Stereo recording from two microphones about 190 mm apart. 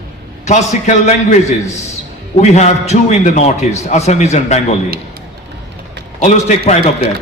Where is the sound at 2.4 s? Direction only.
35° left (ahead or behind).